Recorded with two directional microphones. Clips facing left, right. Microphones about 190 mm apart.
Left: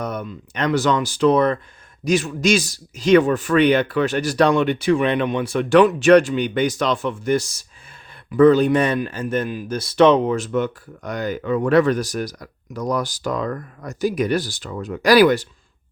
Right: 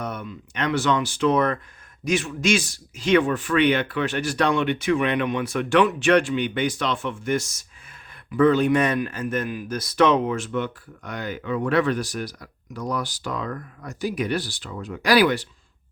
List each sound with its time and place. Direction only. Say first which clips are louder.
0.0 s a man's voice: left 4 dB; 40° left (ahead or behind)